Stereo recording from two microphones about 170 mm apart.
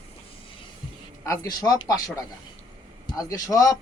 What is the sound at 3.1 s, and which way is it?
Speech, 20° left (ahead or behind).